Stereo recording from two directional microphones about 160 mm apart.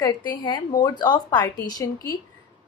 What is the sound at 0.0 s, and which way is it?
A woman's voice, 25° left (ahead or behind).